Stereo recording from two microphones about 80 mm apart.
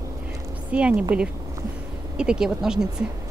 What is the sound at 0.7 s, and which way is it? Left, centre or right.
Speech, centre.